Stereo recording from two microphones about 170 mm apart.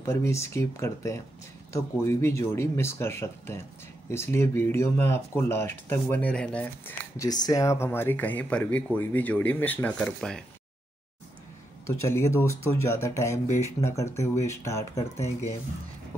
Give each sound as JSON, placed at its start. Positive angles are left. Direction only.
{"t": 0.0, "sound": "speech", "side_deg": 15}
{"t": 7.2, "sound": "speech", "side_deg": 20}
{"t": 11.8, "sound": "speech", "side_deg": 15}